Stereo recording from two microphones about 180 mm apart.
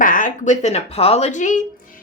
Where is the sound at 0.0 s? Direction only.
45° left (ahead or behind).